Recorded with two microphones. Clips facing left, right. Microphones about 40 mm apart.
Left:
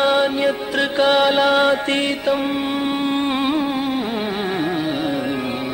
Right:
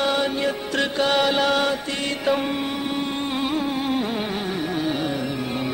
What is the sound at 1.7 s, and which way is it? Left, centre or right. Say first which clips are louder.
Mantra: left 7 dB; left.